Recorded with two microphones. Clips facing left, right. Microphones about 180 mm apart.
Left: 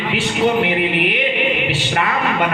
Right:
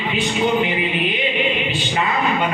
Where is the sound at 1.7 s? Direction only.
65° left (ahead or behind).